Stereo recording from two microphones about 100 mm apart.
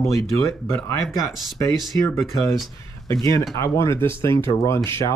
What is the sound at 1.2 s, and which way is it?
Speech, 35° left (ahead or behind).